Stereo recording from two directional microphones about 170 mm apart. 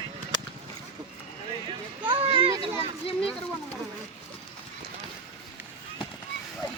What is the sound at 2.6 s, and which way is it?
Children playing, 35° left (ahead or behind).